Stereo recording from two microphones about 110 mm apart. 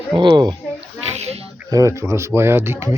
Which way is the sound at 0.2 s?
45° right (ahead or behind).